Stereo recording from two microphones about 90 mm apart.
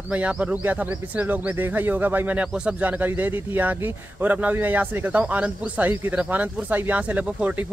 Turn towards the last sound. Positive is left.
turn(degrees=-15)  # may be behind; listen again after turning